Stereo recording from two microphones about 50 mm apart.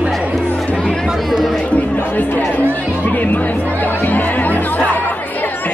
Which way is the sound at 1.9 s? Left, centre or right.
Left.